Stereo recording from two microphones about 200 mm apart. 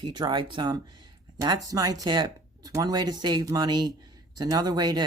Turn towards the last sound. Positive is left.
turn(degrees=-20)  # may be behind; listen again after turning